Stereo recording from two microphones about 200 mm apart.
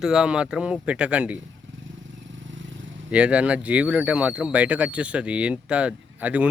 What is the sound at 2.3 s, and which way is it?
Vehicle, 70° right (ahead or behind).